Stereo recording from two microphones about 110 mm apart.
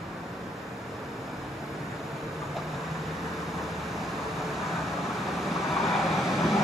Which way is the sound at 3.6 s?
Centre (ahead or behind).